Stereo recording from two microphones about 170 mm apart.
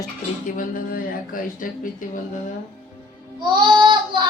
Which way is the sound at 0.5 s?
55° left (ahead or behind).